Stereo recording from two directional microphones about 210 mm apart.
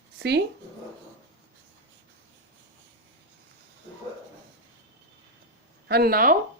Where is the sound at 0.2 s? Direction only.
55° right (ahead or behind).